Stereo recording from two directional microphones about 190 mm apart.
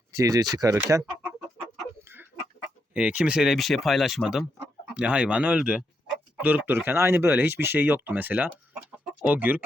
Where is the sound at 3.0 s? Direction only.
5° right (ahead or behind).